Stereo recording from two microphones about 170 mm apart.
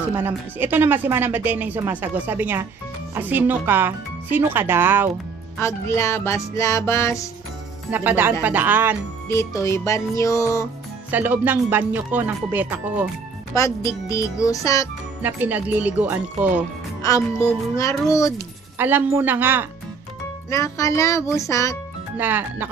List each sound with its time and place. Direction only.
0.1 s speech: 15° right (ahead or behind)
5.6 s music: 15° left (ahead or behind)
7.9 s speech: 10° right (ahead or behind)
9.3 s music: 15° left (ahead or behind)
11.1 s speech: 10° right (ahead or behind)
13.6 s a child's voice: 20° left (ahead or behind)
15.2 s speech: 10° right (ahead or behind)
17.0 s a child's voice: 20° left (ahead or behind)
18.8 s speech: 10° right (ahead or behind)
20.4 s music: 20° left (ahead or behind)
22.1 s speech: 10° right (ahead or behind)